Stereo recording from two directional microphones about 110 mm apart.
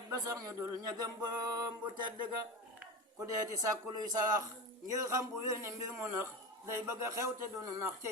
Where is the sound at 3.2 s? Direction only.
30° right (ahead or behind).